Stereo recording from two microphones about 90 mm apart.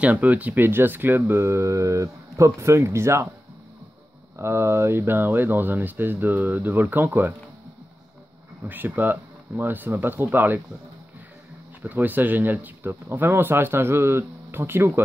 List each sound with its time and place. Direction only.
0.0 s speech: 15° right (ahead or behind)
4.4 s speech: 30° right (ahead or behind)
8.6 s speech: 20° right (ahead or behind)
11.8 s speech: 20° right (ahead or behind)